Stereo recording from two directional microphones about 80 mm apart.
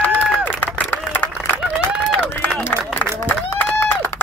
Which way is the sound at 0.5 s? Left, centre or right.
Left.